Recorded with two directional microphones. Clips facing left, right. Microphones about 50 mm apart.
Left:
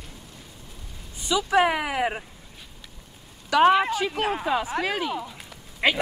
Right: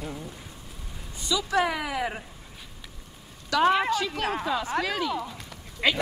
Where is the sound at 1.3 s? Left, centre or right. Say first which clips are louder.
Left 4 dB; left.